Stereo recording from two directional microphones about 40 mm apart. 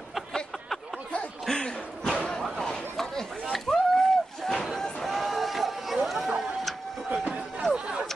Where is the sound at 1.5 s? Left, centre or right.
Left.